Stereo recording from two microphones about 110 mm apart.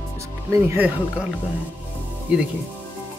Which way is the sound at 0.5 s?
25° right (ahead or behind).